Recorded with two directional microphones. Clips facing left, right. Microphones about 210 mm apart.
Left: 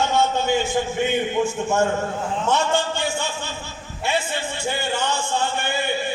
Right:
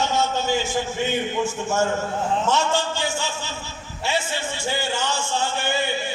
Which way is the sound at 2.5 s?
60° left (ahead or behind).